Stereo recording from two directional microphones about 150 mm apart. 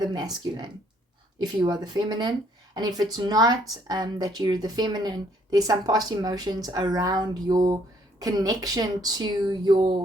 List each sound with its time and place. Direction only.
0.1 s speech: 30° right (ahead or behind)